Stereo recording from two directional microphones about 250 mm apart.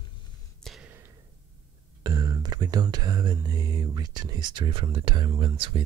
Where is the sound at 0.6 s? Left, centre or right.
Centre.